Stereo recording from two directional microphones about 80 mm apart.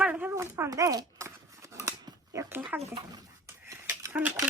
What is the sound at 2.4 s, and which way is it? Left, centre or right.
Speech, right.